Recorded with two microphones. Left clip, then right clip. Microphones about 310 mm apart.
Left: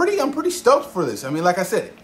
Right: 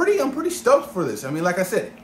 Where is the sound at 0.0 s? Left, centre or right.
Centre.